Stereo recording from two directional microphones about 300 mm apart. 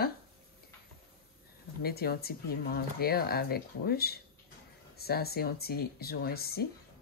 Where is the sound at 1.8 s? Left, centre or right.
Left.